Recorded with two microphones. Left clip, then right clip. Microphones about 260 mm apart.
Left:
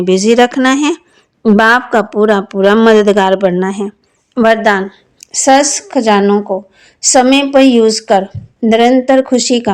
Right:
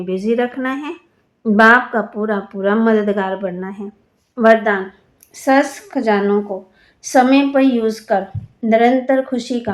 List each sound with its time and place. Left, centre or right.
0.0 s speech: left